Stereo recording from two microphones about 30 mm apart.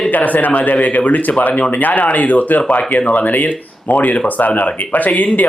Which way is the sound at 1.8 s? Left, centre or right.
Left.